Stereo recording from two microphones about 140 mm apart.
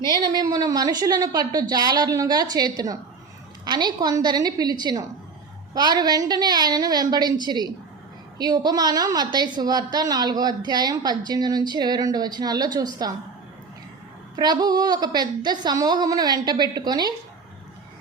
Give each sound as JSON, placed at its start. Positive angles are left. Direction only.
{"t": 0.2, "sound": "a woman's voice", "side_deg": -30}
{"t": 14.3, "sound": "a woman's voice", "side_deg": -30}